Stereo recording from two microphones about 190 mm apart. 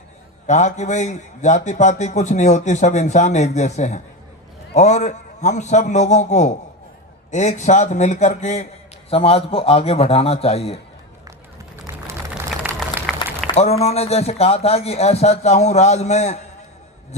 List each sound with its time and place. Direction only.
0.4 s a man's voice: 35° left (ahead or behind)
11.9 s a sound: 10° right (ahead or behind)
13.5 s a man's voice: 35° left (ahead or behind)